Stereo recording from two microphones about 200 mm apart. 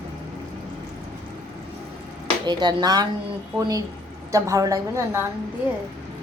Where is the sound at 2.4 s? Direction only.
20° right (ahead or behind).